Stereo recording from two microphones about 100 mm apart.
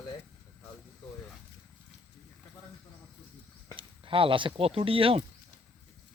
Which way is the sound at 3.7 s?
60° right (ahead or behind).